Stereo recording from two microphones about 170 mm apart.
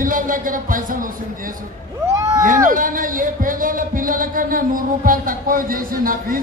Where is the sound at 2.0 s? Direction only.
20° right (ahead or behind).